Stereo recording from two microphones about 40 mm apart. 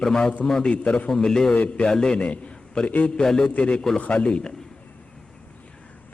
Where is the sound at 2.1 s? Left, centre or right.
Left.